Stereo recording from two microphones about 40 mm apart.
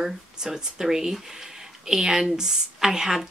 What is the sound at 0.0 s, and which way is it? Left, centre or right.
A woman's voice, centre.